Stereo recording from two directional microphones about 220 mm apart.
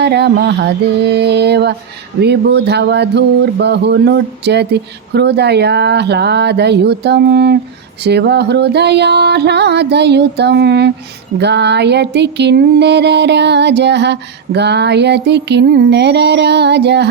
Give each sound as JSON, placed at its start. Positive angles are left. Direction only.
{"t": 0.0, "sound": "music", "side_deg": -50}